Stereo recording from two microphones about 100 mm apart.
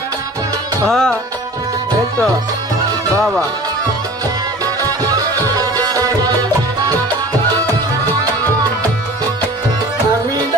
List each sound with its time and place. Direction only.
0.8 s music: 5° left (ahead or behind)
5.5 s music: 40° right (ahead or behind)